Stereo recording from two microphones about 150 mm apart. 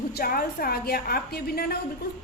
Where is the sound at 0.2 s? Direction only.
85° left.